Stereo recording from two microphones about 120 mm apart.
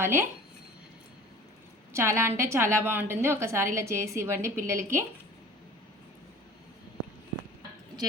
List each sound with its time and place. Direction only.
0.0 s a woman's voice: 20° right (ahead or behind)
1.9 s a woman's voice: 20° right (ahead or behind)